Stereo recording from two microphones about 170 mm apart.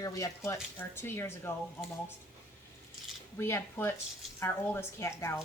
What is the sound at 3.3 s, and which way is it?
A woman's voice, 15° left (ahead or behind).